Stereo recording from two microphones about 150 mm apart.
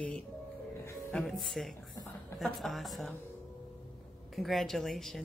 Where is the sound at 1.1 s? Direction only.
Centre (ahead or behind).